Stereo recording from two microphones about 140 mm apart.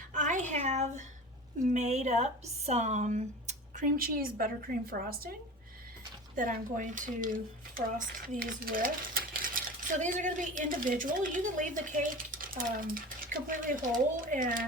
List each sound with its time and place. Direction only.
0.1 s a sound: 65° right (ahead or behind)
1.5 s speech: 60° right (ahead or behind)
3.9 s a woman's voice: 90° right
6.3 s speech: 75° right (ahead or behind)
10.0 s speech: 60° right (ahead or behind)